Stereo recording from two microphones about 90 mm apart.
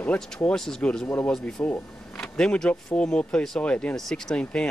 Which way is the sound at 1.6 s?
20° left (ahead or behind).